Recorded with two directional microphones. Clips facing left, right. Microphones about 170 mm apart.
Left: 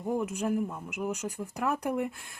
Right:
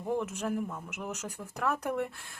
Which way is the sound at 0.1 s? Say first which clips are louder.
Left 2 dB; 10° left (ahead or behind).